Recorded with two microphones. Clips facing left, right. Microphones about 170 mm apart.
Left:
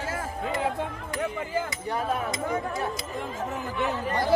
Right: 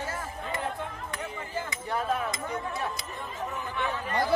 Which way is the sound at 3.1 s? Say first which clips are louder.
Left 4 dB; 90° left.